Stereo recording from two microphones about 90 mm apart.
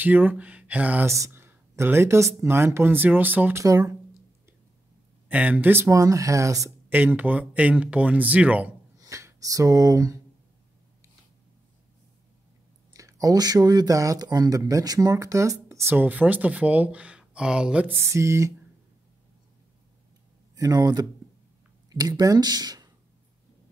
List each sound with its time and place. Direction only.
0.0 s speech: 20° right (ahead or behind)
1.0 s speech: 35° right (ahead or behind)
3.6 s speech: 40° right (ahead or behind)
5.3 s speech: 15° right (ahead or behind); by 6.7 s 35° right (ahead or behind)
6.9 s speech: 20° right (ahead or behind)
8.9 s speech: 40° right (ahead or behind)
12.9 s speech: 40° right (ahead or behind); by 17.8 s 10° right (ahead or behind)
17.8 s speech: 30° right (ahead or behind)
20.5 s speech: 45° right (ahead or behind)